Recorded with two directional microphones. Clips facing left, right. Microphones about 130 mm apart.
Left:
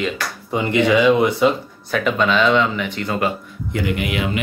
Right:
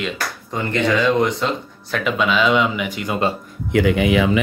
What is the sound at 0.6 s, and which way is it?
Speech, 10° left (ahead or behind).